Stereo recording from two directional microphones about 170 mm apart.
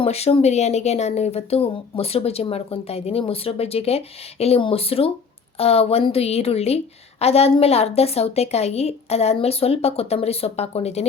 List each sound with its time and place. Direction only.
0.0 s a woman's voice: 35° left (ahead or behind)